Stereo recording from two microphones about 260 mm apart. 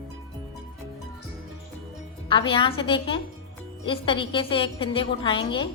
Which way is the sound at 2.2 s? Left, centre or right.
Centre.